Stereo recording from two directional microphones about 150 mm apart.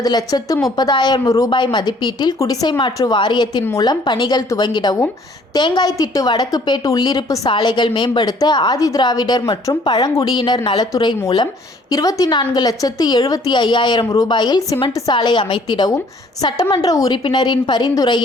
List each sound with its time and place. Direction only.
0.0 s a woman's voice: 25° left (ahead or behind)